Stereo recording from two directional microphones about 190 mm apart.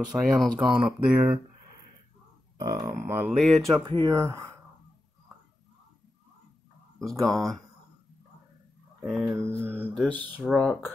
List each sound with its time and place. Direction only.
0.1 s speech: 5° right (ahead or behind)
2.5 s speech: 20° right (ahead or behind); by 3.7 s centre (ahead or behind)
4.1 s speech: 15° right (ahead or behind)
7.0 s speech: 5° left (ahead or behind)
9.0 s speech: centre (ahead or behind)
9.3 s speech: 15° right (ahead or behind)
9.8 s speech: 10° left (ahead or behind)